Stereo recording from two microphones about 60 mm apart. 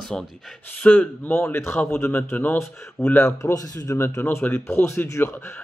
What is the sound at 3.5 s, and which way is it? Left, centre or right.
Speech, left.